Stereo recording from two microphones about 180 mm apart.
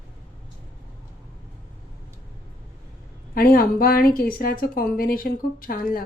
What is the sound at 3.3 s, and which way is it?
Speech, 55° left (ahead or behind).